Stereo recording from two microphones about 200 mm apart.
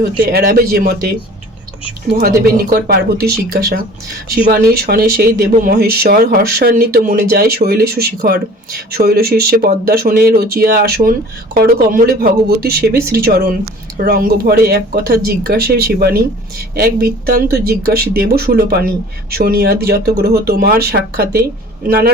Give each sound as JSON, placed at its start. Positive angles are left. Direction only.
{"t": 0.2, "sound": "speech", "side_deg": -45}
{"t": 2.6, "sound": "speech", "side_deg": -50}
{"t": 4.5, "sound": "speech", "side_deg": -50}